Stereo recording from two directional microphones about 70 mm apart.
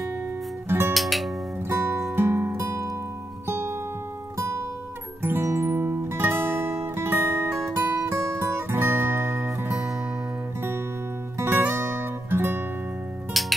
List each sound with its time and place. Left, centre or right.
0.7 s music: right
0.9 s music: centre
1.7 s music: right
11.3 s music: right
13.3 s music: centre